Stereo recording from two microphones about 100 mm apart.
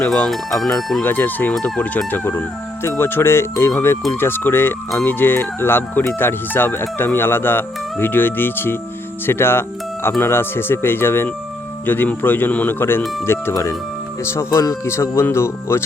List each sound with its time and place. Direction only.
0.0 s speech: 10° left (ahead or behind)
1.0 s speech: 20° left (ahead or behind)